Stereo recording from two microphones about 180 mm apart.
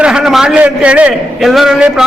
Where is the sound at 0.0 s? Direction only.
5° right (ahead or behind).